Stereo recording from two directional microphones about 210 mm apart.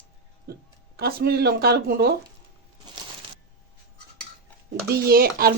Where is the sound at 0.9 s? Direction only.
50° right (ahead or behind).